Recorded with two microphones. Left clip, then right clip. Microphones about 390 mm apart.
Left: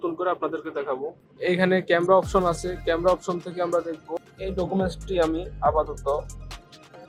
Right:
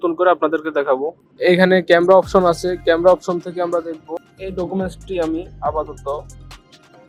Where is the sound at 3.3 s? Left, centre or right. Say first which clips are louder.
Right 5 dB; centre.